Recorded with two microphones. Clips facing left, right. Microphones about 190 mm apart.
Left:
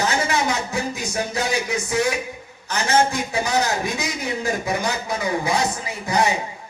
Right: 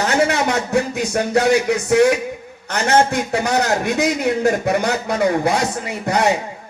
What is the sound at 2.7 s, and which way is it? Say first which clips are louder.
A man's voice: right 4 dB; 65° right (ahead or behind).